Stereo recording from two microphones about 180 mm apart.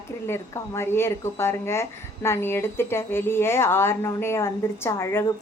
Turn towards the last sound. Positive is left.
turn(degrees=15)  # may be behind; listen again after turning